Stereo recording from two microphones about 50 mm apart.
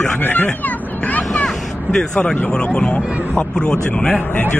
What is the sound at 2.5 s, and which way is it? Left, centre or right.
Speech, left.